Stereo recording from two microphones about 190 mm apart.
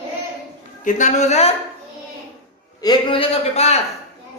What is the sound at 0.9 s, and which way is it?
Speech, 40° left (ahead or behind).